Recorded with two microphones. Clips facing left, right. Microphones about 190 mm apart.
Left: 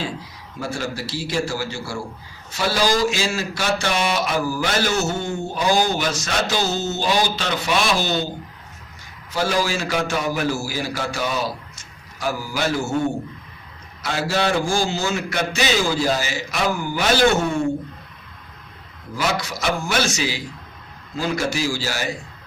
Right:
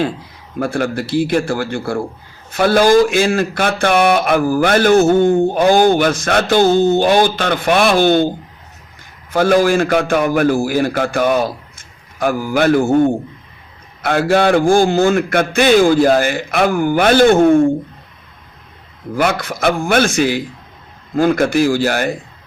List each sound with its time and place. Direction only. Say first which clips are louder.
0.6 s speech: right 9 dB; 55° right (ahead or behind)
9.3 s speech: right 10 dB; 55° right (ahead or behind)
19.1 s speech: right 7 dB; 55° right (ahead or behind)